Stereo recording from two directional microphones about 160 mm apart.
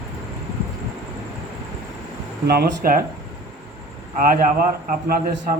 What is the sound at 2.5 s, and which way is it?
Speech, 70° right (ahead or behind).